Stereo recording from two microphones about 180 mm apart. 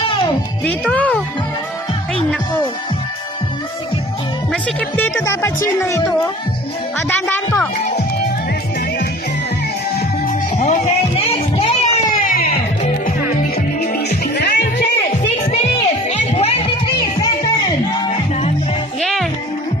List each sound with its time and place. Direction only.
0.7 s speech: 5° left (ahead or behind)
4.5 s speech: 10° left (ahead or behind)
7.1 s speech: 10° left (ahead or behind)
9.9 s music: 45° left (ahead or behind)
12.2 s music: 50° left (ahead or behind)
13.6 s music: 60° left (ahead or behind)
15.7 s music: 35° left (ahead or behind)
18.9 s music: centre (ahead or behind)